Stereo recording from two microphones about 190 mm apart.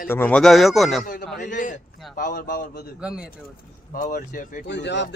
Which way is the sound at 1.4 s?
45° left (ahead or behind).